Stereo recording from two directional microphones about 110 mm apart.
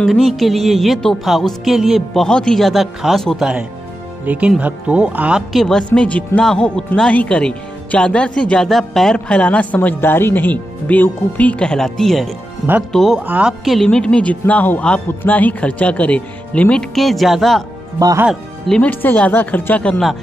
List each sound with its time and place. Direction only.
0.0 s speech: centre (ahead or behind)
4.3 s speech: 10° right (ahead or behind)
5.5 s speech: 5° left (ahead or behind)
13.2 s speech: 15° right (ahead or behind)
13.7 s speech: 5° left (ahead or behind)
16.9 s speech: centre (ahead or behind)
17.9 s speech: 35° right (ahead or behind)
18.3 s speech: 5° left (ahead or behind)
18.9 s speech: 15° left (ahead or behind)